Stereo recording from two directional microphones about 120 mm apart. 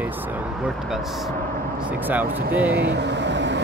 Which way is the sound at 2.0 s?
15° right (ahead or behind).